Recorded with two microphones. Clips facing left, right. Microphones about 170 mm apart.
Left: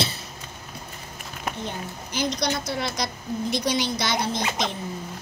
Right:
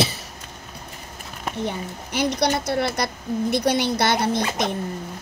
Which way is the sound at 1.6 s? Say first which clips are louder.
Right 5 dB; 65° right (ahead or behind).